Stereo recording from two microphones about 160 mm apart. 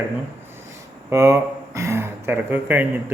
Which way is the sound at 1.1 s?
20° right (ahead or behind).